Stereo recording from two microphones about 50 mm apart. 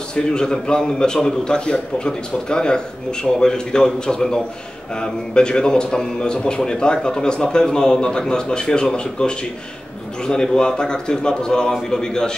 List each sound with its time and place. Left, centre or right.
0.1 s a man's voice: centre